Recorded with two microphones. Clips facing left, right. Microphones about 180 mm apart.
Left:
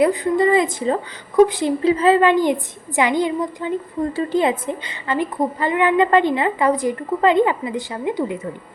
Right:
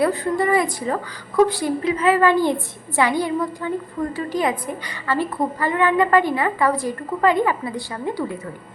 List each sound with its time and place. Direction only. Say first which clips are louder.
0.0 s a woman's voice: left 3 dB; 20° left (ahead or behind)